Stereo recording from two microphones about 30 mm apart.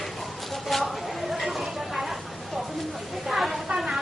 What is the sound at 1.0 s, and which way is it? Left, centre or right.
Chatter, centre.